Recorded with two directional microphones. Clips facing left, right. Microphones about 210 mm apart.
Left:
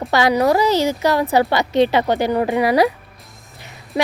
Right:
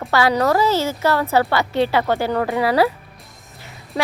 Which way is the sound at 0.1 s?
15° left (ahead or behind).